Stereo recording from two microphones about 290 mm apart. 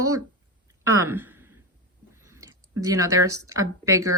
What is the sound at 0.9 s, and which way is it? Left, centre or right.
Speech, centre.